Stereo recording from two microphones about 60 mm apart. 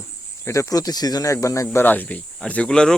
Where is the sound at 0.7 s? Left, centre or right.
Left.